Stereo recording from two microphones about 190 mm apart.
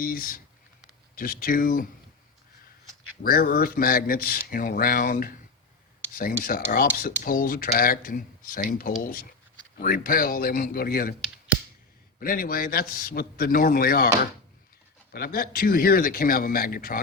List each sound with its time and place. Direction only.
0.0 s speech: 50° left (ahead or behind)
3.2 s speech: 50° left (ahead or behind)
12.2 s speech: 45° left (ahead or behind)
15.1 s speech: 50° left (ahead or behind)